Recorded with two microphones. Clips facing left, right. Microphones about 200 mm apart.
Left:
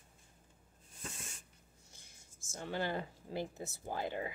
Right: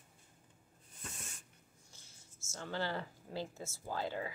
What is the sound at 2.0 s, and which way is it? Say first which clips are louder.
Speech: even; 15° left (ahead or behind).